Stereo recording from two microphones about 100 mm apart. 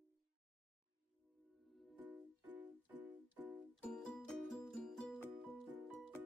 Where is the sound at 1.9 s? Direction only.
15° right (ahead or behind).